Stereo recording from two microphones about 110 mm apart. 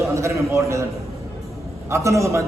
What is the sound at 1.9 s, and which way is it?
Speech, 30° right (ahead or behind).